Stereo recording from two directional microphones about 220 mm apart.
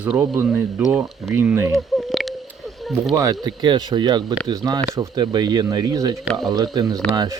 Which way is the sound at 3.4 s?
20° right (ahead or behind).